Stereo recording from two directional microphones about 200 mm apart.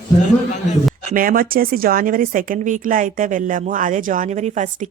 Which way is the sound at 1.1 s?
45° right (ahead or behind).